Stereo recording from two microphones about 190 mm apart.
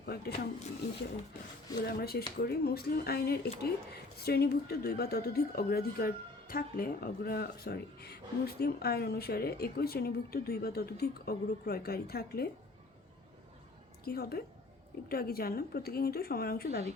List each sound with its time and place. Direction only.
0.0 s a woman's voice: 55° left (ahead or behind)
1.8 s a woman's voice: 55° left (ahead or behind)
14.0 s a woman's voice: 55° left (ahead or behind)